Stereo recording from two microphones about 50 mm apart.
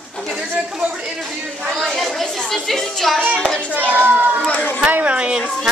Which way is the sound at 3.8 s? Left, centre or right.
Right.